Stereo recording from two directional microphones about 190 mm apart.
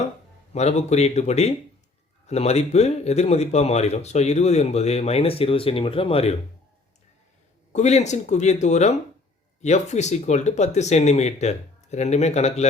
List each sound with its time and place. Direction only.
0.5 s speech: 35° left (ahead or behind)
7.7 s speech: 35° left (ahead or behind)